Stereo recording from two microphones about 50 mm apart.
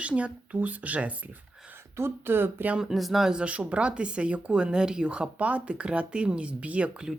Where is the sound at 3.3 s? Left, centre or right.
Right.